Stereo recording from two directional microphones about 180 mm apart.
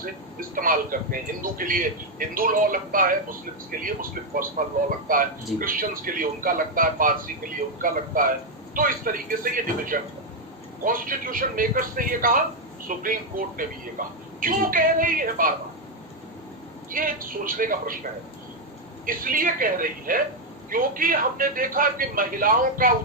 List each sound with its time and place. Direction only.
0.0 s speech: 50° right (ahead or behind)
16.9 s speech: 50° right (ahead or behind)
19.0 s speech: 50° right (ahead or behind)